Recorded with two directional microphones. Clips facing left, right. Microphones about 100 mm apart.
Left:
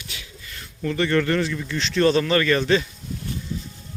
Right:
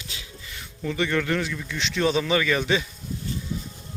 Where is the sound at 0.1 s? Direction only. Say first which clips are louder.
Left 1 dB; 25° right (ahead or behind).